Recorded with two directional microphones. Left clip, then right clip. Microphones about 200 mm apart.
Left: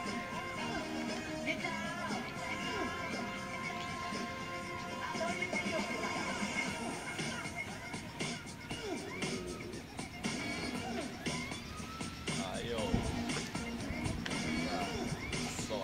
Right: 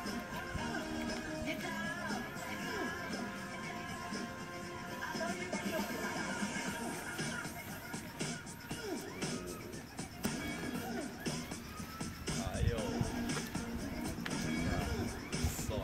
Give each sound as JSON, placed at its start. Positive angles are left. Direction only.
{"t": 0.0, "sound": "music", "side_deg": -35}
{"t": 5.1, "sound": "music", "side_deg": -35}
{"t": 12.3, "sound": "music", "side_deg": -35}